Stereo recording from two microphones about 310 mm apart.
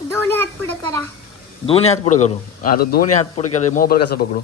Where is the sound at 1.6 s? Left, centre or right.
Centre.